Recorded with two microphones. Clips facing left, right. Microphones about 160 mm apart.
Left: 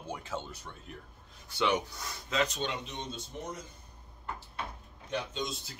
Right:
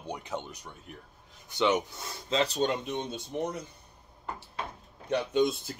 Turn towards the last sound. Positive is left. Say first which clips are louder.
# right 12 dB
turn(degrees=-55)  # may be behind; listen again after turning